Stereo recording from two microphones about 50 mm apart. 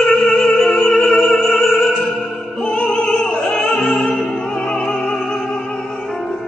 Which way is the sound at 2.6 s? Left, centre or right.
Centre.